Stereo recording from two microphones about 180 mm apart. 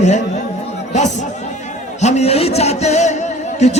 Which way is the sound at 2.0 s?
40° left (ahead or behind).